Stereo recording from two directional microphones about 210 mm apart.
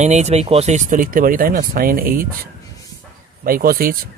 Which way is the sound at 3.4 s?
45° right (ahead or behind).